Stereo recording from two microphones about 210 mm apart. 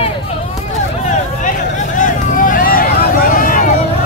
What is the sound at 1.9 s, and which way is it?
Vehicle, 40° left (ahead or behind).